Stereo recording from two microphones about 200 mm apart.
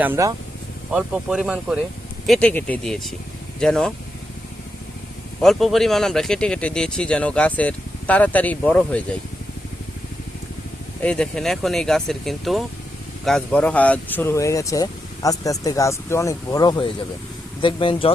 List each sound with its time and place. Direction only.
0.0 s speech: 15° right (ahead or behind); by 3.9 s 5° left (ahead or behind)
5.4 s speech: centre (ahead or behind)
11.0 s speech: 5° left (ahead or behind); by 18.1 s 25° left (ahead or behind)